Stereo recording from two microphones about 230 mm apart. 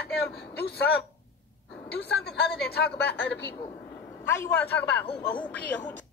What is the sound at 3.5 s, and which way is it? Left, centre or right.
A man's voice, centre.